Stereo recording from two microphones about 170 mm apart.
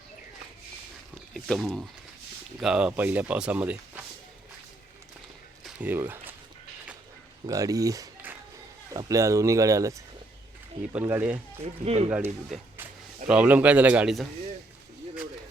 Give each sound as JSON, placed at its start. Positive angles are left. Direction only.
{"t": 1.3, "sound": "speech", "side_deg": 0}
{"t": 5.6, "sound": "speech", "side_deg": -10}
{"t": 7.4, "sound": "speech", "side_deg": -20}
{"t": 11.0, "sound": "speech", "side_deg": -10}
{"t": 11.6, "sound": "speech", "side_deg": -40}
{"t": 12.0, "sound": "speech", "side_deg": -10}